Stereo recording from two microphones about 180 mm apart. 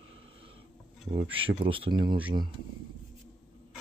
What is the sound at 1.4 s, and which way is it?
Speech, 30° right (ahead or behind).